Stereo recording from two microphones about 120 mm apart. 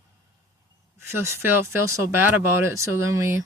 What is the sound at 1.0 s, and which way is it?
Speech, 20° right (ahead or behind).